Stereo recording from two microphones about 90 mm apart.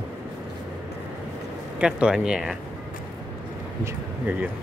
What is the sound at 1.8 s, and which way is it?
Speech, 10° right (ahead or behind).